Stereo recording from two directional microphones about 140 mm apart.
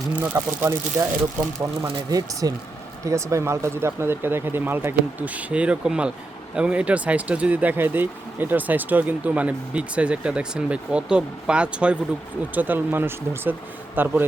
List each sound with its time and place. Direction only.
0.2 s speech: 15° right (ahead or behind)
1.8 s speech: 25° right (ahead or behind)